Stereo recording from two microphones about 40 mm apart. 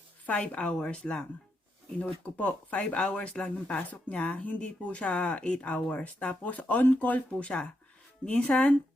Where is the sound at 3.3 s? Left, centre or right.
Left.